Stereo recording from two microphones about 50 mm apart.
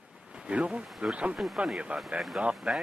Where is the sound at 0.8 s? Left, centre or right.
Centre.